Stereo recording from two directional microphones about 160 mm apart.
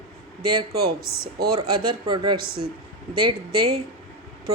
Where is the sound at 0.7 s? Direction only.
70° right (ahead or behind).